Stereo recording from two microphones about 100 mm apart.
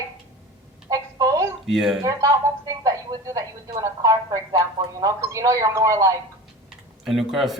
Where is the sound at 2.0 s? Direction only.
35° right (ahead or behind).